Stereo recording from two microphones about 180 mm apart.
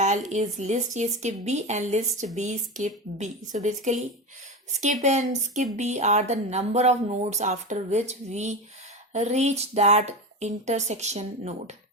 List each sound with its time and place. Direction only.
0.0 s speech: 40° right (ahead or behind)
5.0 s speech: 40° right (ahead or behind)